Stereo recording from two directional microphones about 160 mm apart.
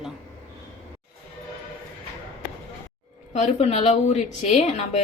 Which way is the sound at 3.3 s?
40° left (ahead or behind).